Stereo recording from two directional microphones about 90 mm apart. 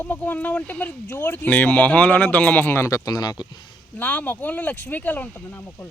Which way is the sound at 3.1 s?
50° left (ahead or behind).